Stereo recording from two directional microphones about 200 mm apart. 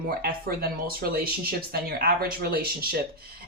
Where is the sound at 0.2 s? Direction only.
50° right (ahead or behind).